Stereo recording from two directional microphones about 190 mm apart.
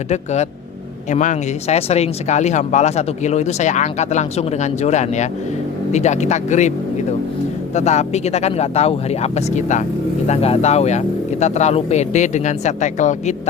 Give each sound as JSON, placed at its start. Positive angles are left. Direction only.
{"t": 0.1, "sound": "speech", "side_deg": 35}
{"t": 7.8, "sound": "speech", "side_deg": 35}